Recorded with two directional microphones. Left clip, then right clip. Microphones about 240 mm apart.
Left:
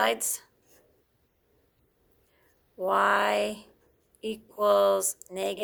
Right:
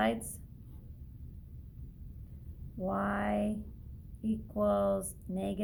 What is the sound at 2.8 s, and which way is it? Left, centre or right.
Speech, left.